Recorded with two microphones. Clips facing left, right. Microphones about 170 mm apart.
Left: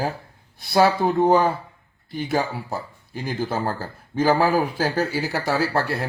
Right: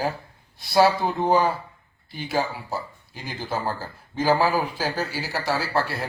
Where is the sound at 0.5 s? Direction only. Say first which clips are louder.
Left 1 dB; 55° left (ahead or behind).